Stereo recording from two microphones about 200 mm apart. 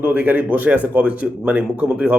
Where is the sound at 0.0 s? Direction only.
10° right (ahead or behind).